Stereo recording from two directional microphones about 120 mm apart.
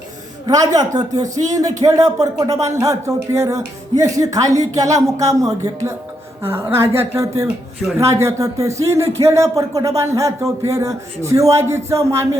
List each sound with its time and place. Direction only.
0.4 s speech: 30° right (ahead or behind)